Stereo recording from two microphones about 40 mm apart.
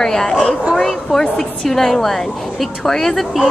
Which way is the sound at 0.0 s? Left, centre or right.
Centre.